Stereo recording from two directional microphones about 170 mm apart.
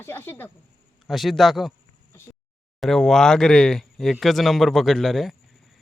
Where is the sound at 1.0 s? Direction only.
Centre (ahead or behind).